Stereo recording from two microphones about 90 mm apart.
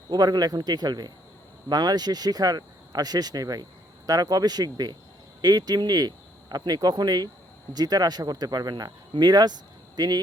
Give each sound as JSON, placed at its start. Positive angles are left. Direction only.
{"t": 0.1, "sound": "speech", "side_deg": -45}